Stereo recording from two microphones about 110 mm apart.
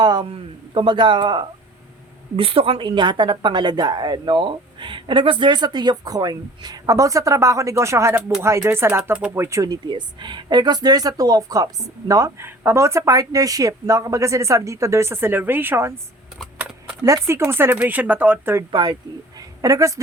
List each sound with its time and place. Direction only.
0.0 s a man's voice: 40° right (ahead or behind)
0.3 s a man's voice: 55° right (ahead or behind)
2.3 s speech: 60° right (ahead or behind); by 9.4 s 15° right (ahead or behind)
9.4 s speech: 25° right (ahead or behind)
16.6 s typing: 10° right (ahead or behind)
17.0 s speech: 30° right (ahead or behind)
18.7 s speech: 40° right (ahead or behind)
19.4 s a sound: 30° right (ahead or behind)